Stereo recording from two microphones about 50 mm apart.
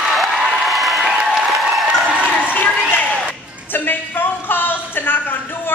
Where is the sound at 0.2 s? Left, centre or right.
Centre.